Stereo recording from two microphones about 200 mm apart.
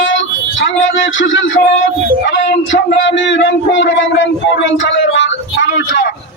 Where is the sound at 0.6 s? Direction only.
70° left (ahead or behind).